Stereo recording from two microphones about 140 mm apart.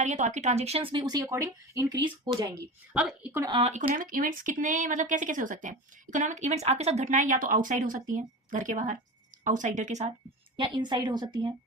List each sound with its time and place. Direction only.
0.0 s speech: 55° right (ahead or behind); by 1.2 s 30° right (ahead or behind)
1.2 s speech: 20° right (ahead or behind)
2.0 s a woman's voice: 35° right (ahead or behind)
2.9 s a woman's voice: 10° right (ahead or behind)
3.5 s speech: 45° right (ahead or behind)
3.8 s speech: 75° right (ahead or behind); by 10.1 s 60° right (ahead or behind)
10.6 s a woman's voice: 30° right (ahead or behind)